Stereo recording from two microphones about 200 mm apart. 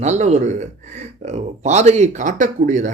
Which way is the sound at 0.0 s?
35° right (ahead or behind).